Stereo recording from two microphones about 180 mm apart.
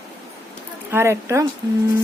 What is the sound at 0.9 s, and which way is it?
Speech, 15° right (ahead or behind).